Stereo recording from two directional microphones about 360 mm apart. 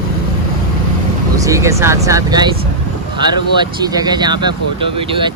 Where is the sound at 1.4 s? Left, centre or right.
Centre.